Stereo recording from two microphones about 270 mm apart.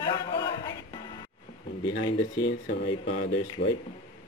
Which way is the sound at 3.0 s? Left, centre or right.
Left.